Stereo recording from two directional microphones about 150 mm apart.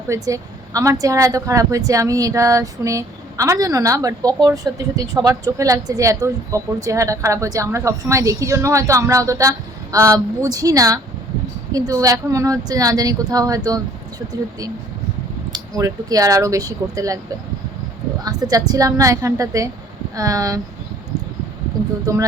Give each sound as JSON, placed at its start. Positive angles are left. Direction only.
{"t": 0.1, "sound": "speech", "side_deg": -20}
{"t": 15.5, "sound": "speech", "side_deg": -25}
{"t": 18.2, "sound": "speech", "side_deg": -25}
{"t": 22.0, "sound": "speech", "side_deg": -25}